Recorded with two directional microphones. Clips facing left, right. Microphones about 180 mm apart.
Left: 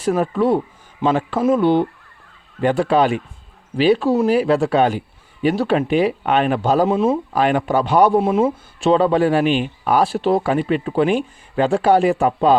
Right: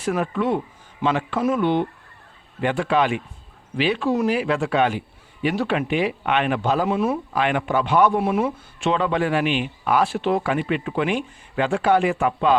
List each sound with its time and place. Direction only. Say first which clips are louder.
0.0 s a man's voice: left 5 dB; 35° left (ahead or behind)
7.3 s a man's voice: left 4 dB; 40° left (ahead or behind)